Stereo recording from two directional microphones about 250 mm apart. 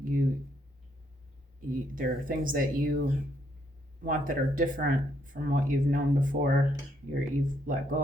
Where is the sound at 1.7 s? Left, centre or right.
Right.